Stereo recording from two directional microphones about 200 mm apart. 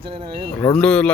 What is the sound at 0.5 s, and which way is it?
Speech, 5° left (ahead or behind).